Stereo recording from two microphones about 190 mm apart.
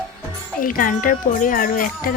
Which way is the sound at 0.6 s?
45° left (ahead or behind).